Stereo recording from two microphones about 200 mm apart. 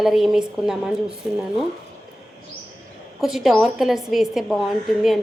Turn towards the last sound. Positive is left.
turn(degrees=0)  # may be behind; listen again after turning